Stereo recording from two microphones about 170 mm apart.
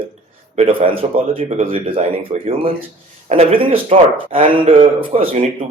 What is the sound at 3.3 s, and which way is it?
Speech, 35° right (ahead or behind).